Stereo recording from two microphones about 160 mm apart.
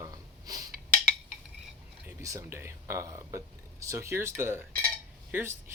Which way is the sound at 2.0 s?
20° right (ahead or behind).